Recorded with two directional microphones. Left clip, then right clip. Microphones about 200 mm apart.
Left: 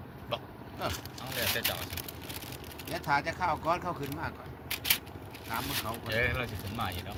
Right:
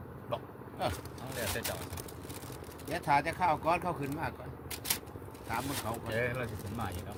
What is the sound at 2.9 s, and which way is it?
Speech, 50° right (ahead or behind).